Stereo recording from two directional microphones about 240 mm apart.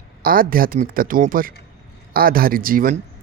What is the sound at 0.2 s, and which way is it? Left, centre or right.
Speech, right.